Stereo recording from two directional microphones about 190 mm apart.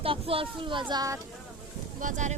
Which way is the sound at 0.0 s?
30° right (ahead or behind).